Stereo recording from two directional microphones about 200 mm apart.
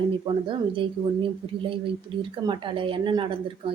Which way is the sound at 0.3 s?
20° right (ahead or behind).